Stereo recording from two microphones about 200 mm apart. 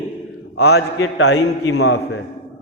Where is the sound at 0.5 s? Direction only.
55° left (ahead or behind).